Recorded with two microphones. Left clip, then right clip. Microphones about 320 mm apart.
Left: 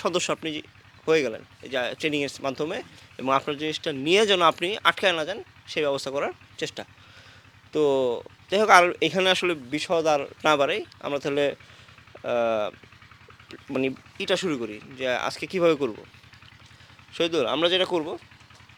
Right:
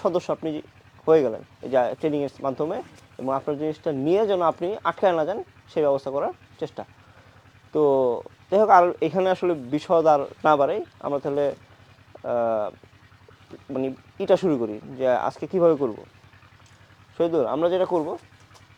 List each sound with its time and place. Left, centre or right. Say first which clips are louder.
0.0 s speech: right 2 dB; centre
1.0 s speech: right 4 dB; centre
4.1 s speech: left 2 dB; centre
5.0 s speech: right 3 dB; centre
5.9 s speech: right 3 dB; centre
8.6 s speech: even; centre
9.7 s speech: right 5 dB; right
10.4 s speech: even; centre
11.2 s speech: left 1 dB; centre
14.3 s speech: right 6 dB; centre
15.5 s speech: right 2 dB; centre
17.2 s speech: right 2 dB; centre